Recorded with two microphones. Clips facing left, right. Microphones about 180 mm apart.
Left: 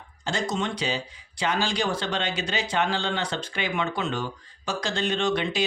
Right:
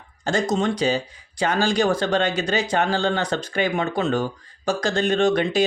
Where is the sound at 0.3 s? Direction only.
45° right (ahead or behind).